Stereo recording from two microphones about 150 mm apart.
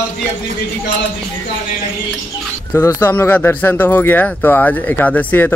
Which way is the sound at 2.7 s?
15° left (ahead or behind).